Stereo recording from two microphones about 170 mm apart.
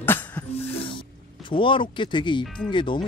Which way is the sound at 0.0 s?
10° left (ahead or behind).